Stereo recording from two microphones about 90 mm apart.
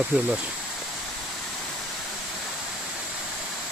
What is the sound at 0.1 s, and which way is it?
Speech, 15° right (ahead or behind).